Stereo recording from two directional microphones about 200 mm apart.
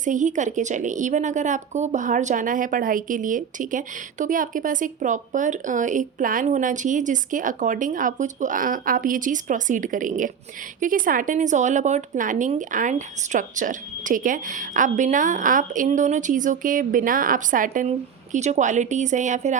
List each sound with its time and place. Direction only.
0.0 s a woman's voice: 40° right (ahead or behind)